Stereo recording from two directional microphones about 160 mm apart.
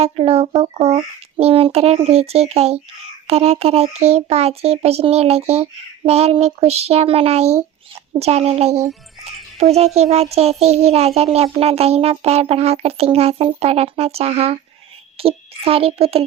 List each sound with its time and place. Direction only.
0.0 s a child's voice: 40° right (ahead or behind)